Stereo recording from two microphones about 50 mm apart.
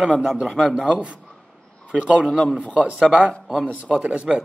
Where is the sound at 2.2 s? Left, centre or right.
Centre.